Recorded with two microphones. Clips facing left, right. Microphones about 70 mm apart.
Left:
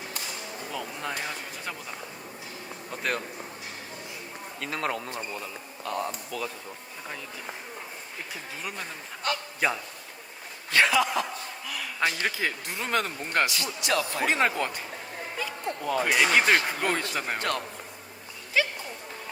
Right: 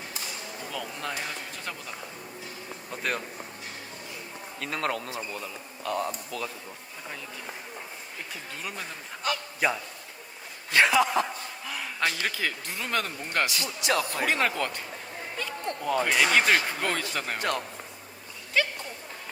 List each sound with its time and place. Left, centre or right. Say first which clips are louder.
0.7 s speech: left 1 dB; centre
2.9 s speech: left 1 dB; centre
4.6 s speech: even; centre
8.6 s speech: even; centre
10.7 s speech: right 1 dB; centre
11.9 s speech: left 2 dB; centre
13.6 s speech: even; right
14.1 s speech: left 1 dB; left
15.4 s speech: even; centre
17.3 s a man's voice: right 1 dB; centre
18.5 s a sound: even; centre